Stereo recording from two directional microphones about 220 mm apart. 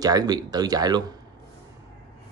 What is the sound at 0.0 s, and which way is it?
Speech, 15° right (ahead or behind).